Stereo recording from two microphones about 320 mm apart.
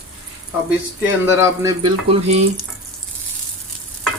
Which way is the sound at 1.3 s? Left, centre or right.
Centre.